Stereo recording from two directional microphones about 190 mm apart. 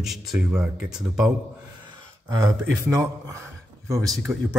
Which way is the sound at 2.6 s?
10° right (ahead or behind).